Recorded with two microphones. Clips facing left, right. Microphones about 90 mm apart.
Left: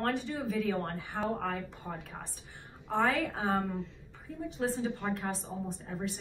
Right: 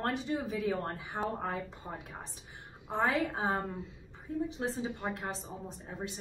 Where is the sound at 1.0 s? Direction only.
20° right (ahead or behind).